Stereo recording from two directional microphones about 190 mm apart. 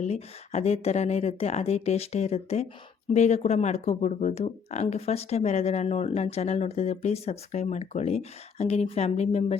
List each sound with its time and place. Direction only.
0.0 s speech: 35° left (ahead or behind)